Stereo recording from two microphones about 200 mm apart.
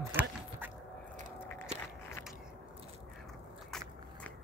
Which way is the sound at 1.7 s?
35° right (ahead or behind).